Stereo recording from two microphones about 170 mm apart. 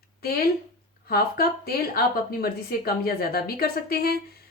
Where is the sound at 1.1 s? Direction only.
60° left (ahead or behind).